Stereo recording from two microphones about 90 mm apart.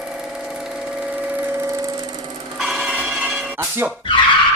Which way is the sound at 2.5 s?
Centre (ahead or behind).